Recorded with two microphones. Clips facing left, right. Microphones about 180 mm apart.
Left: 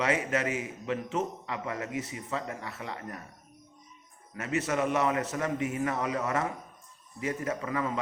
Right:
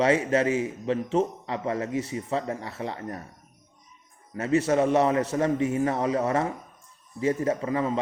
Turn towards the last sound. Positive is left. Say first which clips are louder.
# right 6 dB
turn(degrees=-30)  # may be behind; listen again after turning